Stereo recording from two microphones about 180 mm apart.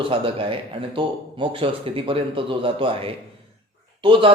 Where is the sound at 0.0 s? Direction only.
30° right (ahead or behind).